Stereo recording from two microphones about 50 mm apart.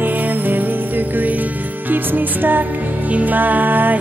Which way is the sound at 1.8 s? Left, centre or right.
Right.